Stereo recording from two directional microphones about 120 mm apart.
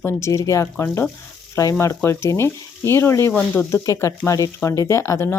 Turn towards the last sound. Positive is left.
turn(degrees=20)  # may be behind; listen again after turning